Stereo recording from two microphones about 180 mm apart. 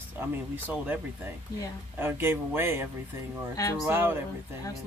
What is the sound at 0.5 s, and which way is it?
Speech, 10° right (ahead or behind).